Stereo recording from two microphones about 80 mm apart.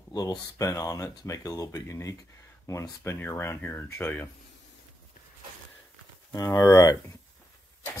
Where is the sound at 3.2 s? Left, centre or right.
Left.